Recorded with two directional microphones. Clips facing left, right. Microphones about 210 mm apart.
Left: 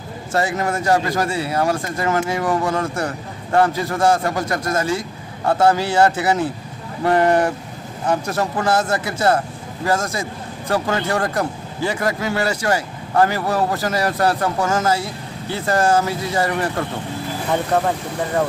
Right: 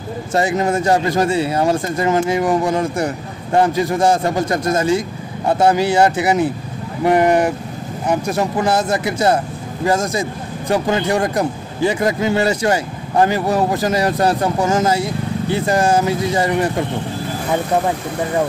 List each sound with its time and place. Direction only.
0.3 s speech: 20° right (ahead or behind)